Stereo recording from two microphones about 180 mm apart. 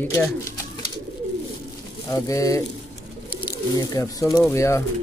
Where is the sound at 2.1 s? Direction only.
20° left (ahead or behind).